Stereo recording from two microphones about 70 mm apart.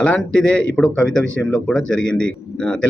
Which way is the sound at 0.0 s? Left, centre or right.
Centre.